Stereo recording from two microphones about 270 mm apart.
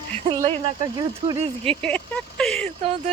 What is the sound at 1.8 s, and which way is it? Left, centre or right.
Speech, centre.